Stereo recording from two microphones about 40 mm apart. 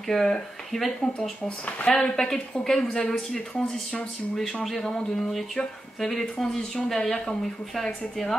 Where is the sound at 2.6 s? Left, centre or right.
Centre.